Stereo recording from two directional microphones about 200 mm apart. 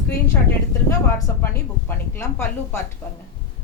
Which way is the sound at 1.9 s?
10° left (ahead or behind).